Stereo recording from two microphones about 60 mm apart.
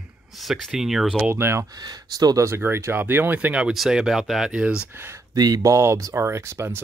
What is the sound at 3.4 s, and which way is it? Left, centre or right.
Speech, centre.